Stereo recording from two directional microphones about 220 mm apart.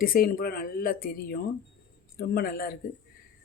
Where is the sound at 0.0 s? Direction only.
40° left (ahead or behind).